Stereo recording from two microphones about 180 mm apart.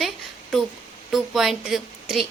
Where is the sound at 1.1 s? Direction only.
Centre (ahead or behind).